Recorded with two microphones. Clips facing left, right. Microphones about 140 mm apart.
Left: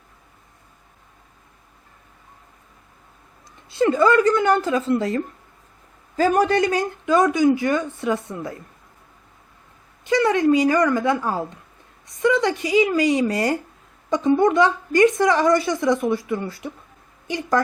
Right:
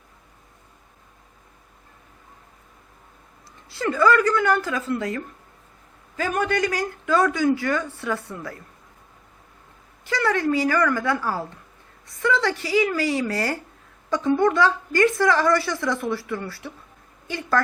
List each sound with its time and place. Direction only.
3.7 s a woman's voice: 20° left (ahead or behind)
10.0 s a woman's voice: 20° left (ahead or behind)